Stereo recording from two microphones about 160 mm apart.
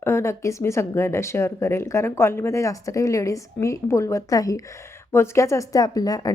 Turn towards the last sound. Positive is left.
turn(degrees=25)  # may be behind; listen again after turning